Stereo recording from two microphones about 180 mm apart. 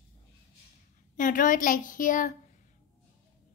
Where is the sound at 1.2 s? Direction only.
45° left (ahead or behind).